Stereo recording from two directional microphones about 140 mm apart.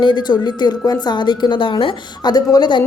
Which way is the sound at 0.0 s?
35° left (ahead or behind).